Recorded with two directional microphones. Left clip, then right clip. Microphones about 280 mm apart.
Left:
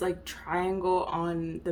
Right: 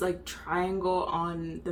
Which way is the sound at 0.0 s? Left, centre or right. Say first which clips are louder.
Even; left.